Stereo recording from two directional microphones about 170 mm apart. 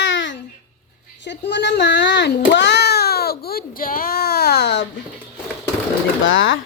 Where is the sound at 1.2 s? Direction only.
90° left; by 4.8 s 75° left (ahead or behind).